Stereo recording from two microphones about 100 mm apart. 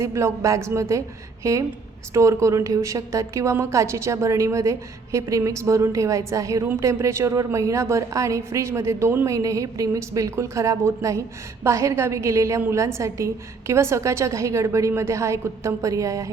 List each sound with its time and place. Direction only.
0.0 s a woman's voice: 30° right (ahead or behind)